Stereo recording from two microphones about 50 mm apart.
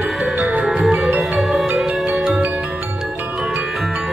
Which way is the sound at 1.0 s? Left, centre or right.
Right.